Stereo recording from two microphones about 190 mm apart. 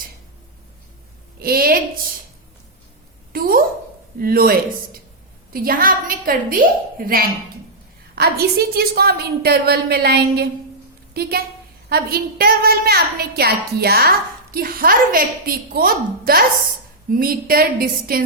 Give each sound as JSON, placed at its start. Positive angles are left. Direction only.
{"t": 1.4, "sound": "a woman's voice", "side_deg": -50}
{"t": 3.3, "sound": "a sound", "side_deg": -50}
{"t": 4.2, "sound": "a woman's voice", "side_deg": -50}